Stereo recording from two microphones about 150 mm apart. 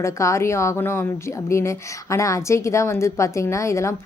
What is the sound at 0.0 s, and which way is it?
A woman's voice, 20° left (ahead or behind).